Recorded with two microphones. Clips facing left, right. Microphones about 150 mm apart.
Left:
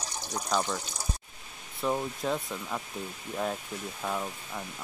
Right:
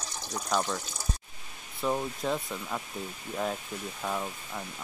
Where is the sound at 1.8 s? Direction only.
Centre (ahead or behind).